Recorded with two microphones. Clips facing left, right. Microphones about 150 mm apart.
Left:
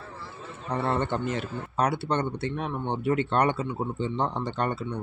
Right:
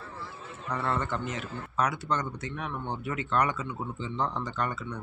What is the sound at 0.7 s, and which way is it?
Speech, 30° left (ahead or behind).